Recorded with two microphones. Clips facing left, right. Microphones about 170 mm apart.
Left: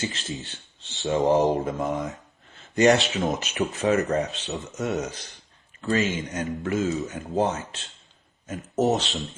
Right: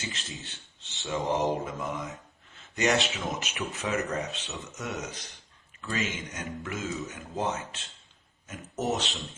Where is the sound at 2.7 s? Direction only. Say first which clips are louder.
Left 8 dB; 35° left (ahead or behind).